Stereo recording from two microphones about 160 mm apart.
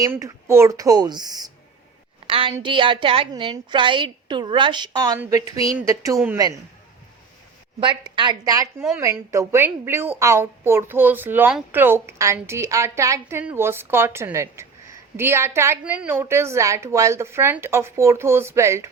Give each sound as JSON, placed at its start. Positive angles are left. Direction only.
{"t": 0.0, "sound": "a woman's voice", "side_deg": -20}
{"t": 2.5, "sound": "a woman's voice", "side_deg": -30}
{"t": 7.8, "sound": "a woman's voice", "side_deg": -30}